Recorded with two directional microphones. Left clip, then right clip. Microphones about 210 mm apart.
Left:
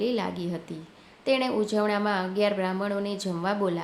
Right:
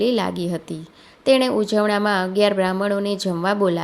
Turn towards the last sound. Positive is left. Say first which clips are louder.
# right 8 dB
turn(degrees=-35)  # may be behind; listen again after turning